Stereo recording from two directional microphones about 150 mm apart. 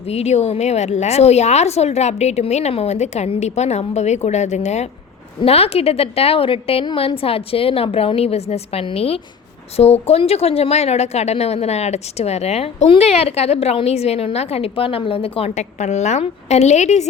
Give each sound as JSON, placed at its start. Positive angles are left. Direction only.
{"t": 0.1, "sound": "a woman's voice", "side_deg": 45}